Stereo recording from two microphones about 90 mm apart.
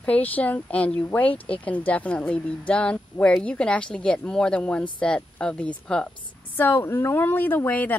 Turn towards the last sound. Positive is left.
turn(degrees=20)  # may be behind; listen again after turning